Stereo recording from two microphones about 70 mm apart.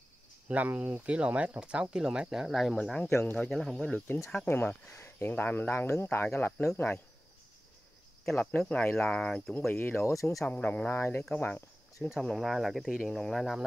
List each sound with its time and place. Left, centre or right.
0.5 s speech: centre
3.1 s speech: left
3.4 s speech: centre
4.5 s speech: left
6.0 s speech: left
6.3 s speech: left
8.4 s speech: left
9.7 s speech: left
10.0 s speech: left
10.5 s speech: left
12.2 s speech: centre